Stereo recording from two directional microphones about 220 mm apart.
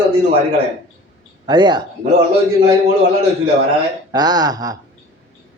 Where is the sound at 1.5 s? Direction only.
20° right (ahead or behind).